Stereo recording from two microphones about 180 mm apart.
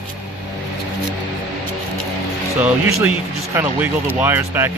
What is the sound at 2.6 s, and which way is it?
Speech, 10° right (ahead or behind).